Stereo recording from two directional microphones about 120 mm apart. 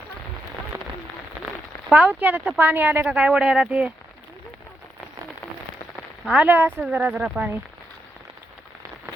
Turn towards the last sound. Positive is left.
turn(degrees=-10)  # may be behind; listen again after turning